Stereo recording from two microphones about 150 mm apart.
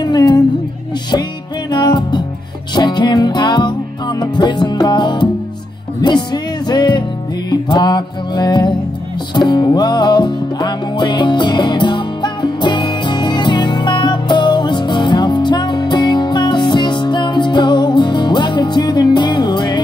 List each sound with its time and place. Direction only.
0.0 s music: 30° left (ahead or behind)
1.7 s music: 30° left (ahead or behind)